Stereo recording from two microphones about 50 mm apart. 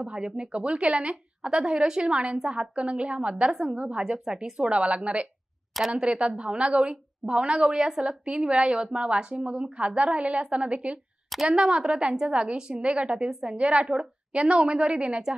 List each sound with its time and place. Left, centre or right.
0.0 s a woman's voice: centre
11.4 s a woman's voice: centre